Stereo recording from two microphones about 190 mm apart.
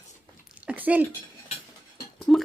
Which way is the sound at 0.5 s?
10° right (ahead or behind).